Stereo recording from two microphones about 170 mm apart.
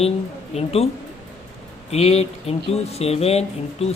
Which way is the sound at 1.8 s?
40° left (ahead or behind).